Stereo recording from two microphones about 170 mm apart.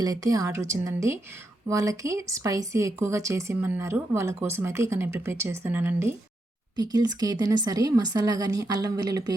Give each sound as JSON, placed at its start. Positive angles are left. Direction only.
{"t": 0.0, "sound": "speech", "side_deg": -20}
{"t": 6.7, "sound": "speech", "side_deg": -25}